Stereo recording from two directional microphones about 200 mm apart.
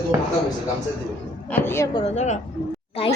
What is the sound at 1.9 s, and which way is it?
Speech, 30° left (ahead or behind).